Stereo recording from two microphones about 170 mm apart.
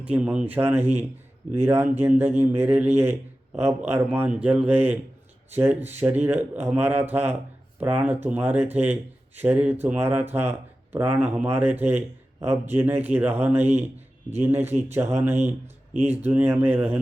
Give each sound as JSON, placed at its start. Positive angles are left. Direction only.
{"t": 0.0, "sound": "a man's voice", "side_deg": -10}
{"t": 0.8, "sound": "speech", "side_deg": -40}
{"t": 1.5, "sound": "a man's voice", "side_deg": -15}